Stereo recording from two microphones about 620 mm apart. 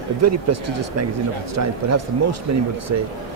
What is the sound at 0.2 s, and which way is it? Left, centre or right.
Speech, right.